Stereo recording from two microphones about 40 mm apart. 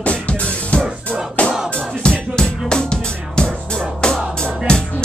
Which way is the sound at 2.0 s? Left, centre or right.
Left.